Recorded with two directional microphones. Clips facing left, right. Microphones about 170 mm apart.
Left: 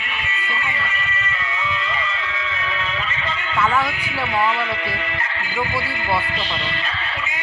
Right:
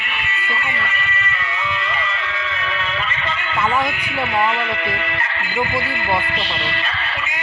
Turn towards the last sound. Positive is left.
turn(degrees=-65)  # may be behind; listen again after turning